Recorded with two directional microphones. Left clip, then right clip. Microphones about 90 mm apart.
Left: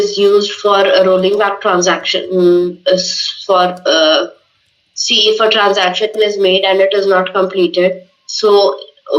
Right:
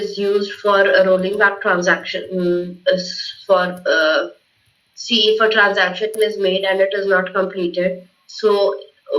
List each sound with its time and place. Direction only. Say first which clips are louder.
0.1 s speech: left 8 dB; 45° left (ahead or behind)
1.0 s speech: left 4 dB; 60° left (ahead or behind)